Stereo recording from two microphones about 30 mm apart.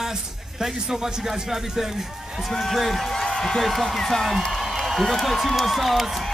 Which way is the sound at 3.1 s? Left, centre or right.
Centre.